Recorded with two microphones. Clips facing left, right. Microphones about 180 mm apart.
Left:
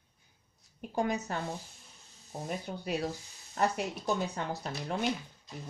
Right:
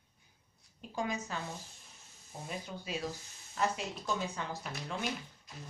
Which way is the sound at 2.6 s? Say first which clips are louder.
Left 5 dB; 65° left (ahead or behind).